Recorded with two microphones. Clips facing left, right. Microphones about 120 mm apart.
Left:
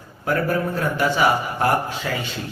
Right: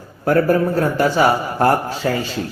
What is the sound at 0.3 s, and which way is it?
A man's voice, 40° right (ahead or behind).